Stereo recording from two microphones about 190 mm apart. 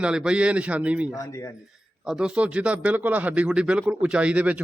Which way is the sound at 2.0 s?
5° right (ahead or behind).